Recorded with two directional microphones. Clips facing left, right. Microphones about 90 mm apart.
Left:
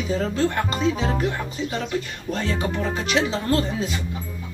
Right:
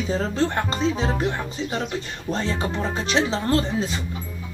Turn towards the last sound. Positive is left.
turn(degrees=-30)  # may be behind; listen again after turning